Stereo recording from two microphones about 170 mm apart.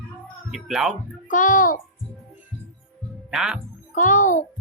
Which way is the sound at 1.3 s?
50° left (ahead or behind).